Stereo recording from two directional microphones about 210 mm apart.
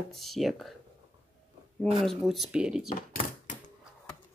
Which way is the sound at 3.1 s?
40° left (ahead or behind).